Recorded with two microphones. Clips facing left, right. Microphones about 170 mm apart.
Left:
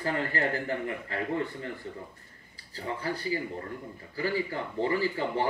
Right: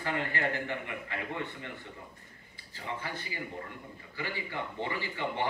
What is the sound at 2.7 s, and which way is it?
A man's voice, 35° left (ahead or behind).